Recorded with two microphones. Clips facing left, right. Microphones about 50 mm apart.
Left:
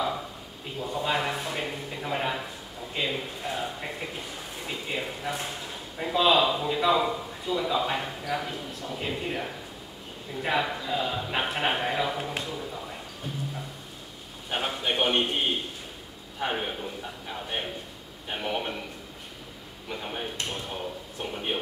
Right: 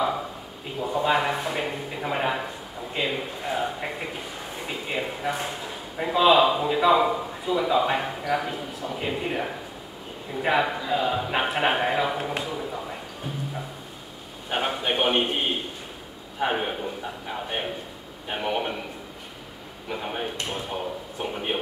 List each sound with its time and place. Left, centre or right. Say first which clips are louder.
0.0 s a man's voice: right 4 dB; centre
12.5 s music: right 4 dB; centre
14.5 s a man's voice: right 3 dB; centre
19.9 s a man's voice: right 4 dB; centre